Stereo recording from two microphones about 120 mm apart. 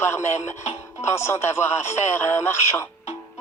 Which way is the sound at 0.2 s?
70° left (ahead or behind).